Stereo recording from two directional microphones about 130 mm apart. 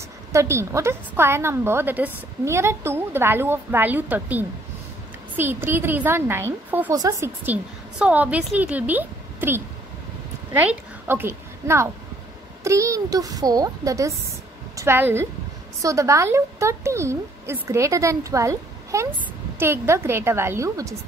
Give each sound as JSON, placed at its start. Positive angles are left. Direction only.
{"t": 0.3, "sound": "a woman's voice", "side_deg": -20}
{"t": 7.4, "sound": "a woman's voice", "side_deg": -10}